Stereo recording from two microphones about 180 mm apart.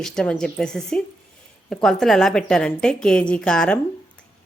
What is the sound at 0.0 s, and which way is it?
A woman's voice, 5° left (ahead or behind).